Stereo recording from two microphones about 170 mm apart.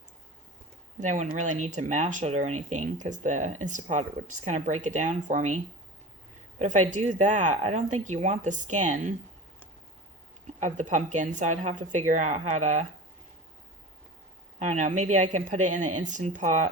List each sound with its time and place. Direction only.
0.9 s speech: 45° right (ahead or behind)
6.6 s speech: 45° right (ahead or behind)
10.6 s speech: 45° right (ahead or behind)
14.6 s speech: 45° right (ahead or behind)